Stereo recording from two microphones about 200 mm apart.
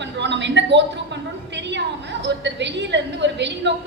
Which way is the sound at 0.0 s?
60° right (ahead or behind).